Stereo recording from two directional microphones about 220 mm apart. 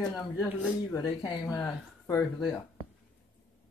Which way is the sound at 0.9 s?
15° left (ahead or behind).